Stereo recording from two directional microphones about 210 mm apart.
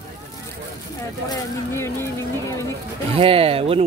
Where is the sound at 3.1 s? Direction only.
25° right (ahead or behind).